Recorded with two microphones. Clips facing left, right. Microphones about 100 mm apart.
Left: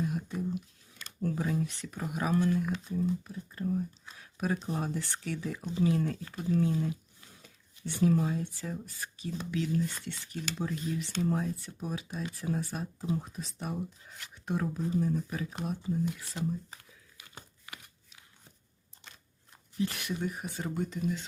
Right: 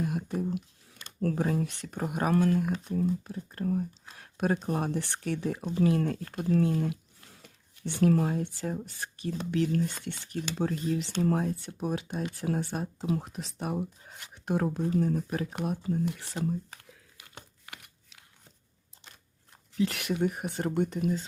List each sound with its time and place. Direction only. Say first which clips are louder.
0.0 s a sound: right 3 dB; 55° right (ahead or behind)
1.4 s speech: right 3 dB; 50° right (ahead or behind)
11.8 s speech: right 6 dB; 70° right (ahead or behind)
13.0 s speech: right 1 dB; 85° right; by 16.2 s 65° right (ahead or behind)
19.7 s speech: right 4 dB; 90° right; by 21.1 s 65° right (ahead or behind)